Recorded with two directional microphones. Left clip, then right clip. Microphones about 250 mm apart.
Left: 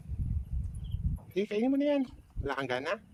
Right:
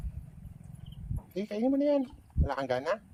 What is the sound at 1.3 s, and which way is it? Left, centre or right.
Speech, centre.